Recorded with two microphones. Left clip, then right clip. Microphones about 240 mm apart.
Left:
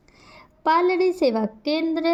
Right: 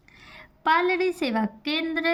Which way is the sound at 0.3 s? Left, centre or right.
Centre.